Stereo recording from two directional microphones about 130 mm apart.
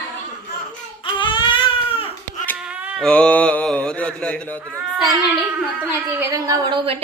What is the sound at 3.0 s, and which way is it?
Mantra, 10° left (ahead or behind).